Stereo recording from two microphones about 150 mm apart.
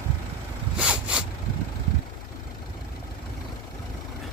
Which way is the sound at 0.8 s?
5° right (ahead or behind).